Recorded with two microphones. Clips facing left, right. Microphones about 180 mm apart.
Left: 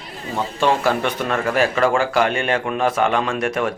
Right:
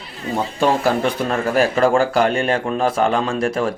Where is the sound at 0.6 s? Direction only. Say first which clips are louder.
Right 1 dB; 40° right (ahead or behind).